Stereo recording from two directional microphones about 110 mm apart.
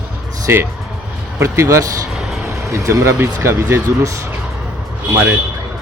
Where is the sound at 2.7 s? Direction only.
25° right (ahead or behind).